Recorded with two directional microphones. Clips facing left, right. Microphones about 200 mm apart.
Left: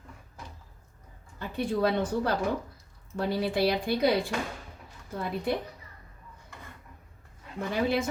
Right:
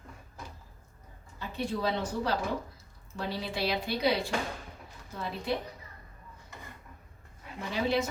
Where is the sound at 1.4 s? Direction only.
55° left (ahead or behind).